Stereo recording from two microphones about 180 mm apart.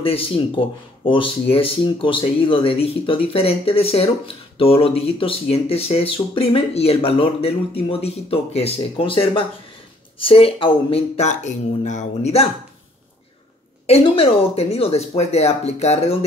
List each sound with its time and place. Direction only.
0.0 s speech: 30° left (ahead or behind)
13.8 s speech: 35° left (ahead or behind)